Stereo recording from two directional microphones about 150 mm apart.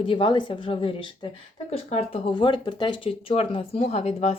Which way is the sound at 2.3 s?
30° left (ahead or behind).